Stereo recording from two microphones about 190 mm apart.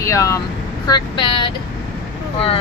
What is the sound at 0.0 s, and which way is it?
Speech, 15° left (ahead or behind).